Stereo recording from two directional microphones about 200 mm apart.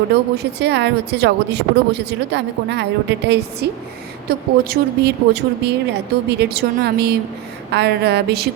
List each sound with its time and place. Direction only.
0.1 s a woman's voice: 55° right (ahead or behind)